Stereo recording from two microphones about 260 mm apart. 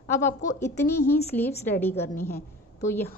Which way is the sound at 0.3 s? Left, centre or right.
Left.